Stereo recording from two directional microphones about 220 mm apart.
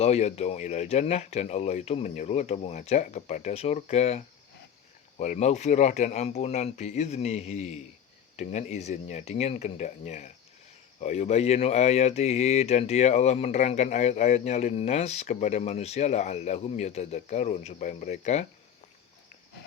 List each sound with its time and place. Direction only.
0.0 s speech: 30° left (ahead or behind)